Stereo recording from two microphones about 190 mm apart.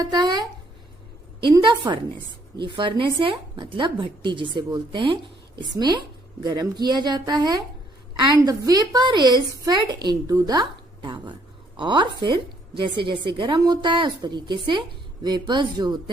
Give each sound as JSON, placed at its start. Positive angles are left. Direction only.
{"t": 0.0, "sound": "a woman's voice", "side_deg": -20}